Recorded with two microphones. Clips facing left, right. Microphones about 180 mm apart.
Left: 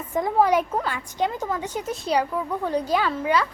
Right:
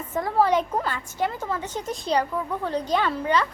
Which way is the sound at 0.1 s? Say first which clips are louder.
Left 1 dB; 15° left (ahead or behind).